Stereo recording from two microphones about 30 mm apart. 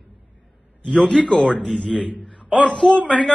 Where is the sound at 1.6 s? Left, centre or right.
Centre.